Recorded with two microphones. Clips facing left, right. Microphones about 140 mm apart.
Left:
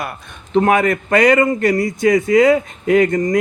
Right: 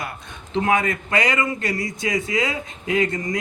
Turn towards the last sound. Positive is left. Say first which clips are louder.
# left 8 dB
turn(degrees=40)  # may be behind; listen again after turning